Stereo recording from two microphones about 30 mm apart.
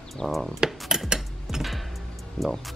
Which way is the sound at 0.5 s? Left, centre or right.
Centre.